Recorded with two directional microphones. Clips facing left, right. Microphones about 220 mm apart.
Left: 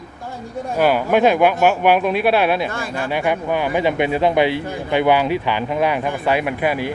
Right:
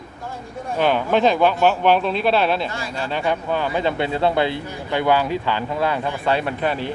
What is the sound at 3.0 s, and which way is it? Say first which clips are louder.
Speech: left 2 dB; 15° left (ahead or behind).